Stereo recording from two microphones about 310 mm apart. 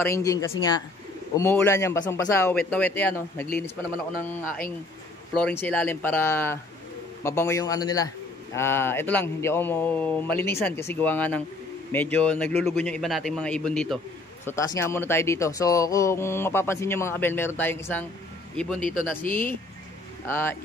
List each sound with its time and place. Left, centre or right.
0.0 s speech: centre
5.4 s a man's voice: centre
18.8 s speech: left
20.2 s speech: centre